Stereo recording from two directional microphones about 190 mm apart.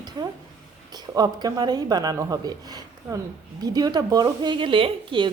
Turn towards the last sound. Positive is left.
turn(degrees=-25)  # may be behind; listen again after turning